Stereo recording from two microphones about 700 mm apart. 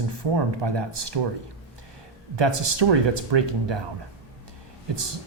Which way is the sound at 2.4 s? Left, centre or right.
Right.